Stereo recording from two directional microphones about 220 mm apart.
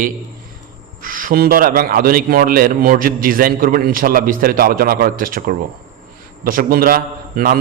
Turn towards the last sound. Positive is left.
turn(degrees=-40)  # may be behind; listen again after turning